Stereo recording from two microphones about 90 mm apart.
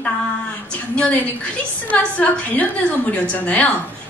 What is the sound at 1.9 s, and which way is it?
A woman's voice, 15° left (ahead or behind).